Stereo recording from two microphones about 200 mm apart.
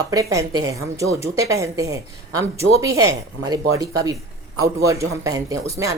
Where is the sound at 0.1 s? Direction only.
15° right (ahead or behind).